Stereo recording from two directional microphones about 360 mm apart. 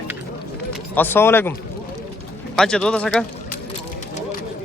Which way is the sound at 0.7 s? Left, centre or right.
Centre.